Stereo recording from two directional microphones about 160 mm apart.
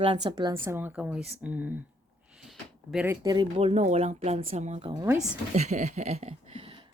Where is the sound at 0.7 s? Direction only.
15° right (ahead or behind).